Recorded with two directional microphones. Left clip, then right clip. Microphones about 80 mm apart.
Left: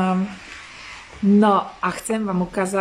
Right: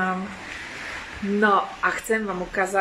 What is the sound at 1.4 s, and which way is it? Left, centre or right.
Speech, left.